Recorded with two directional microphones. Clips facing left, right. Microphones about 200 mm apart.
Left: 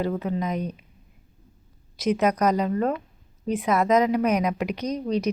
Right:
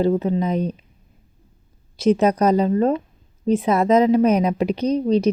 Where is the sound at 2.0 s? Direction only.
30° right (ahead or behind).